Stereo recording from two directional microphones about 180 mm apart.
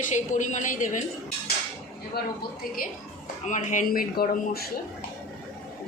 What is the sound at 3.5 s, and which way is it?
A woman's voice, 45° left (ahead or behind).